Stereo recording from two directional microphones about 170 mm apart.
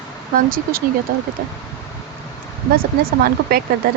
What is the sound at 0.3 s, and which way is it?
Speech, 55° right (ahead or behind).